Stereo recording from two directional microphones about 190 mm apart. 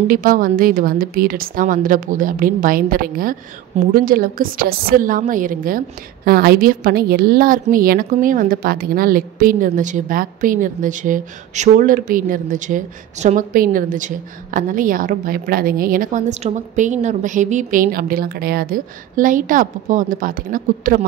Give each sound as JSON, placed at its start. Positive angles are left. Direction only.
{"t": 0.1, "sound": "a woman's voice", "side_deg": -50}